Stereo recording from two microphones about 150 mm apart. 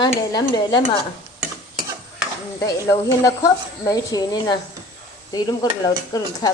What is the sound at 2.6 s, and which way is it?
Speech, 20° left (ahead or behind).